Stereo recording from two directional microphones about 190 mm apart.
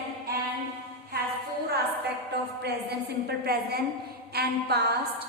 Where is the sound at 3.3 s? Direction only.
55° right (ahead or behind).